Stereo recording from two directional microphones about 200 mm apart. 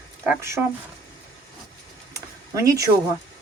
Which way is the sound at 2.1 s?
15° right (ahead or behind).